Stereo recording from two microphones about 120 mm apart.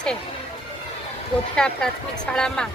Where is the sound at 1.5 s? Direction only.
5° left (ahead or behind).